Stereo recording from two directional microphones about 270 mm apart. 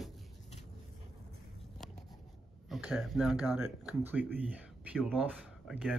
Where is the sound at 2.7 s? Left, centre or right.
Centre.